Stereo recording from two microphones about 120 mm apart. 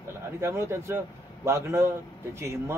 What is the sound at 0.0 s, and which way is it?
A man's voice, 20° right (ahead or behind).